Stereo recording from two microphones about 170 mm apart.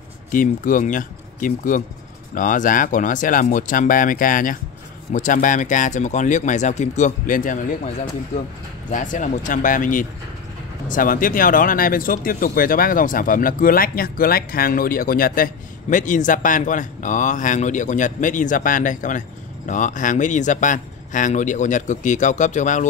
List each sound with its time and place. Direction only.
0.3 s speech: 50° left (ahead or behind)
8.9 s speech: 50° left (ahead or behind)